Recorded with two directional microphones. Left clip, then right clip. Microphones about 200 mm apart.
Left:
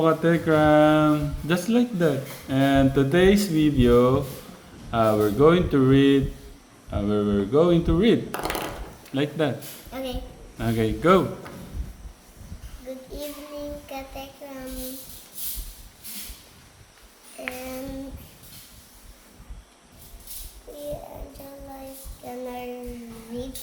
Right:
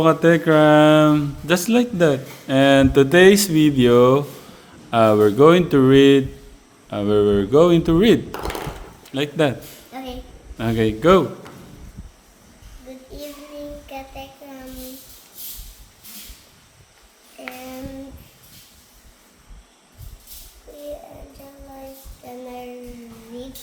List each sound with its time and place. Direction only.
0.0 s speech: 40° right (ahead or behind)
9.9 s a sound: 10° left (ahead or behind)
10.6 s speech: 35° right (ahead or behind)
12.9 s music: 10° left (ahead or behind)
13.8 s child singing: 10° left (ahead or behind)
17.4 s female singing: 10° left (ahead or behind)
22.2 s music: 10° left (ahead or behind)